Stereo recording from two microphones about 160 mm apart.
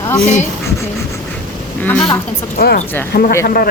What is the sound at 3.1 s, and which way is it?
Speech, 85° left.